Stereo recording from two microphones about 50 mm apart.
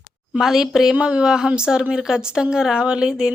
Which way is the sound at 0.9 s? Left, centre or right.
Right.